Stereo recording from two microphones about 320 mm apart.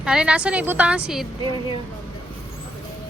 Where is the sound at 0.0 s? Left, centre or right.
Centre.